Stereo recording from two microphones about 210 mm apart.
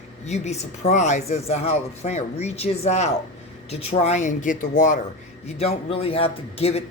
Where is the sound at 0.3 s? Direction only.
30° left (ahead or behind).